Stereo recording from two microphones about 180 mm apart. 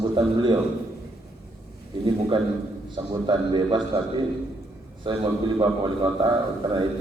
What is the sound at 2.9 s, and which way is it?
A man's voice, 25° right (ahead or behind).